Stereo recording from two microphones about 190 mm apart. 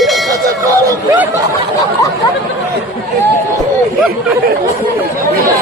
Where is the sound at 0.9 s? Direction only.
15° right (ahead or behind).